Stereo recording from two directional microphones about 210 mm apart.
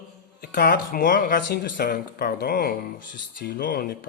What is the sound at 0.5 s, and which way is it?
Speech, 45° left (ahead or behind).